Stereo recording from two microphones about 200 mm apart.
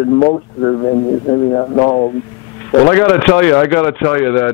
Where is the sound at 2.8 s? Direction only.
10° left (ahead or behind).